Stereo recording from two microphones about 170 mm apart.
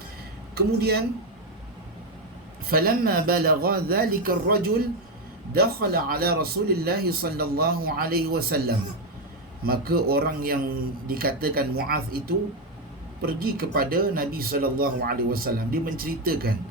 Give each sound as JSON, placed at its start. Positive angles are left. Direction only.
{"t": 0.5, "sound": "speech", "side_deg": -70}
{"t": 2.6, "sound": "a man's voice", "side_deg": -60}